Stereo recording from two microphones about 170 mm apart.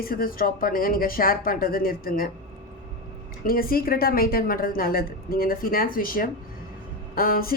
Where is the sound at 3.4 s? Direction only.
60° left (ahead or behind).